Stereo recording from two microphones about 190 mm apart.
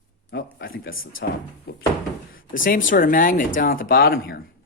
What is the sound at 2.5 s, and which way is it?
A woman's voice, 45° left (ahead or behind).